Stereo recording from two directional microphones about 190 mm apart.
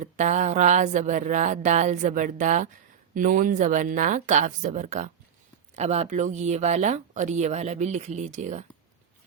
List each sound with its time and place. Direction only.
0.0 s speech: 40° right (ahead or behind)